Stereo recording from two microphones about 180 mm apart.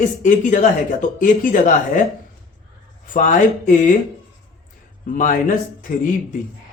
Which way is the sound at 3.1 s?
45° left (ahead or behind).